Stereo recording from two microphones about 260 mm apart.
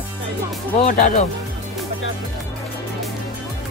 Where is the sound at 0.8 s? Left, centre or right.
Left.